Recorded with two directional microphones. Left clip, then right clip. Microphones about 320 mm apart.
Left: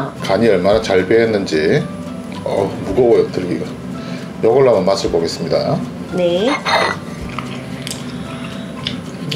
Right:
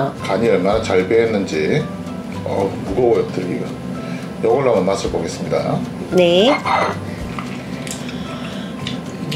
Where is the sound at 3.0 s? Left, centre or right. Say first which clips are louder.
Left 3 dB; left.